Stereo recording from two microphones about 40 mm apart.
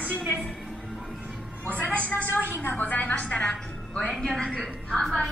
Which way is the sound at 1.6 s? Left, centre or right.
Left.